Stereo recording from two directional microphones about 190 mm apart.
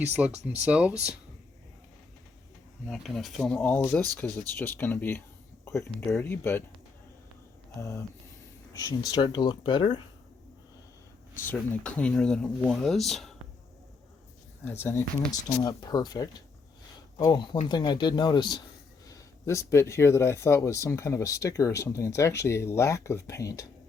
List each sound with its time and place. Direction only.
0.4 s speech: 5° right (ahead or behind)
2.8 s speech: centre (ahead or behind)
7.8 s speech: 15° left (ahead or behind)
11.4 s speech: 10° left (ahead or behind)
14.8 s speech: 15° left (ahead or behind)